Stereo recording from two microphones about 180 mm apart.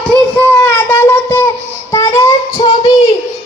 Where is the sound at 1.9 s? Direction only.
20° left (ahead or behind).